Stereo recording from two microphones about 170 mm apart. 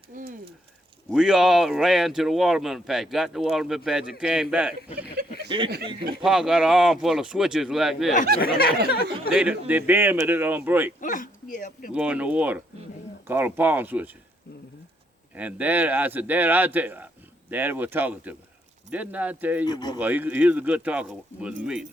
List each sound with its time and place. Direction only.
0.1 s a sound: 50° right (ahead or behind)
1.1 s speech: 5° right (ahead or behind)
5.5 s speech: 30° right (ahead or behind)
6.2 s speech: 5° right (ahead or behind)
8.4 s a sound: 60° left (ahead or behind)
9.3 s speech: 5° right (ahead or behind)
11.0 s speech: 50° left (ahead or behind)
11.9 s speech: 10° right (ahead or behind)
15.4 s speech: 10° right (ahead or behind)
19.6 s speech: 25° left (ahead or behind)
20.0 s speech: 10° right (ahead or behind)